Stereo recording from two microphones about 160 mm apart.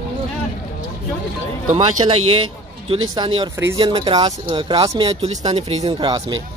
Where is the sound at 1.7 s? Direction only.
40° right (ahead or behind).